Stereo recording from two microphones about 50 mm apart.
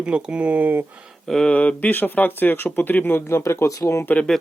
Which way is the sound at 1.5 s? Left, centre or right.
Left.